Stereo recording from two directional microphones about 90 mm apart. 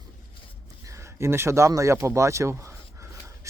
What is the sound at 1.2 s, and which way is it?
Speech, 30° right (ahead or behind).